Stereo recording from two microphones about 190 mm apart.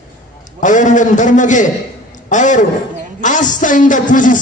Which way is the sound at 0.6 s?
40° left (ahead or behind).